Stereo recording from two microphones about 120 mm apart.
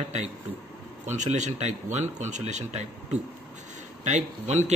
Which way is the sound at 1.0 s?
90° right.